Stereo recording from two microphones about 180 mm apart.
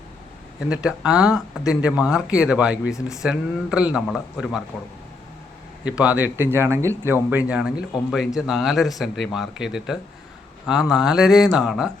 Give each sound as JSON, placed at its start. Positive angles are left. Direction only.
{"t": 0.7, "sound": "speech", "side_deg": -5}
{"t": 2.9, "sound": "speech", "side_deg": 15}
{"t": 3.2, "sound": "speech", "side_deg": -5}
{"t": 5.8, "sound": "speech", "side_deg": -5}